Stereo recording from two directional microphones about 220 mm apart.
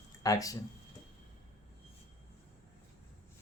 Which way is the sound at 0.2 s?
15° left (ahead or behind).